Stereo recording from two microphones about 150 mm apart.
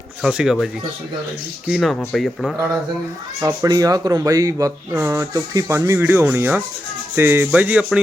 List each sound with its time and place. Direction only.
0.2 s speech: 5° right (ahead or behind)
3.4 s speech: 20° right (ahead or behind)
7.2 s rub: 15° right (ahead or behind)